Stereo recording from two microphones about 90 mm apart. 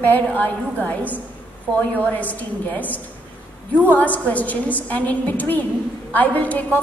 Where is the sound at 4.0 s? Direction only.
15° left (ahead or behind).